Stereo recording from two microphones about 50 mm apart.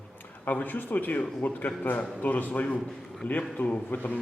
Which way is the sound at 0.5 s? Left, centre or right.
Left.